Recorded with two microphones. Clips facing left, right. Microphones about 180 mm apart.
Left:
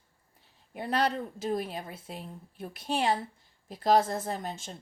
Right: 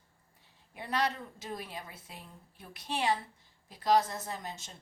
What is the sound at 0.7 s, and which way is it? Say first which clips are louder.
A woman's voice: left 4 dB; 55° left (ahead or behind).